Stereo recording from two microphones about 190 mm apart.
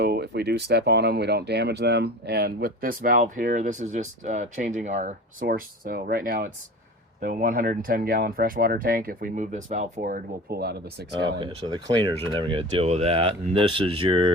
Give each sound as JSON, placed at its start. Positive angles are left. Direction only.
{"t": 0.0, "sound": "speech", "side_deg": -55}
{"t": 5.5, "sound": "speech", "side_deg": -50}
{"t": 11.3, "sound": "speech", "side_deg": -25}